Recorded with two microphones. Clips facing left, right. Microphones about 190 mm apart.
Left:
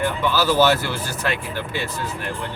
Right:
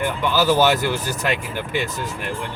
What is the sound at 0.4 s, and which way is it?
Speech, 15° right (ahead or behind).